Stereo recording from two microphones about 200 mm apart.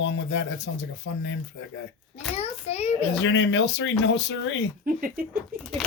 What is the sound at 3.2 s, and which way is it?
Speech, 65° left (ahead or behind).